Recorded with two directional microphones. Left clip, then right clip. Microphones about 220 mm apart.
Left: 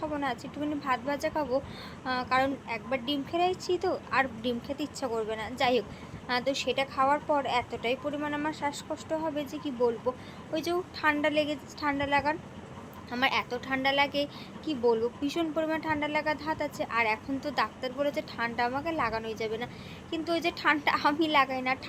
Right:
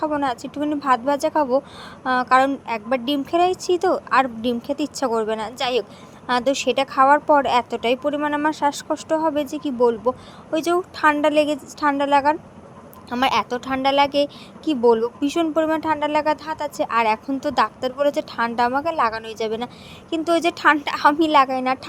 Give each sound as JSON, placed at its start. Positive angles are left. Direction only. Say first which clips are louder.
{"t": 0.0, "sound": "a woman's voice", "louder": "right 10 dB", "side_deg": -35}